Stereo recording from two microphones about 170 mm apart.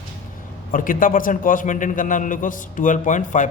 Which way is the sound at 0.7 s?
55° left (ahead or behind).